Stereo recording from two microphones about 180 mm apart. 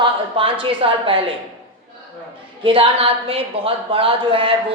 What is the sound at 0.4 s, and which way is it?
Speech, 30° right (ahead or behind).